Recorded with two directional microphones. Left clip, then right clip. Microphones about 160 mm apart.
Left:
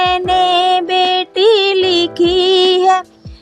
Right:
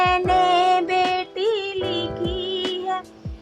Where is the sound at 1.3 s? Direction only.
40° left (ahead or behind).